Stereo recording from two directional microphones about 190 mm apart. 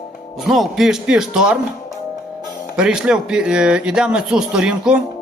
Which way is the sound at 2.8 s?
5° right (ahead or behind).